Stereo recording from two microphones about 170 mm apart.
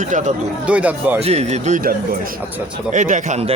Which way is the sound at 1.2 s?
40° right (ahead or behind).